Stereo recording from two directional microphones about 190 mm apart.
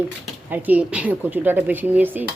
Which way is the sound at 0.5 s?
10° right (ahead or behind).